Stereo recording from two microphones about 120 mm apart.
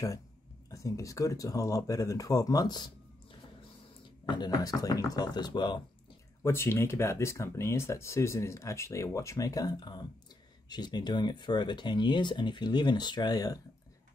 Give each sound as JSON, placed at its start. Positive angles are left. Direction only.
{"t": 0.7, "sound": "speech", "side_deg": 25}
{"t": 4.4, "sound": "speech", "side_deg": 30}
{"t": 6.4, "sound": "speech", "side_deg": 20}